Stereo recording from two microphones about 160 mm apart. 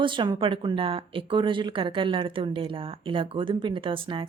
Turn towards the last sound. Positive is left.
turn(degrees=-30)  # may be behind; listen again after turning